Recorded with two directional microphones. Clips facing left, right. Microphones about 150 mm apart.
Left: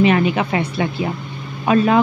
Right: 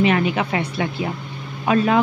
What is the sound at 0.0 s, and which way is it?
Speech, 25° left (ahead or behind).